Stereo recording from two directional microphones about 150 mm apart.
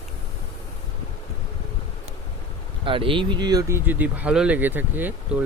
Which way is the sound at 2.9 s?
35° right (ahead or behind).